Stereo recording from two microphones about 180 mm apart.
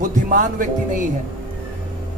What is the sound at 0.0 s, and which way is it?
Speech, 50° right (ahead or behind).